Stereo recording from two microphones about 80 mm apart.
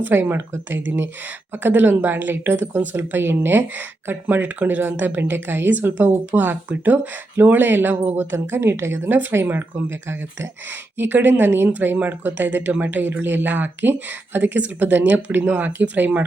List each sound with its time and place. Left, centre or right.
0.0 s a woman's voice: right